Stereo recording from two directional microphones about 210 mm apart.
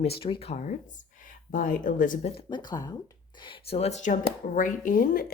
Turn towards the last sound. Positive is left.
turn(degrees=40)  # may be behind; listen again after turning